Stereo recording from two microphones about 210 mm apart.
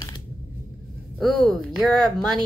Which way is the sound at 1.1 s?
Centre (ahead or behind).